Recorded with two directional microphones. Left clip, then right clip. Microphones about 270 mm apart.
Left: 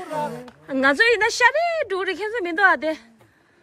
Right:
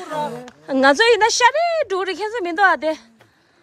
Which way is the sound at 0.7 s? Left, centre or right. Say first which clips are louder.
Right 4 dB; centre.